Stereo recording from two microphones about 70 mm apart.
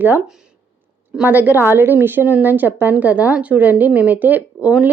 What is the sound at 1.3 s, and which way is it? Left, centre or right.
A woman's voice, right.